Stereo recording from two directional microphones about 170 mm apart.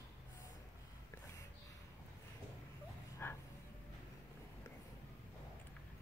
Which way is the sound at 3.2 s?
15° left (ahead or behind).